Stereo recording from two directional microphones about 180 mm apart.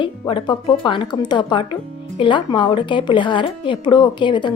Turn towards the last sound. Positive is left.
turn(degrees=25)  # may be behind; listen again after turning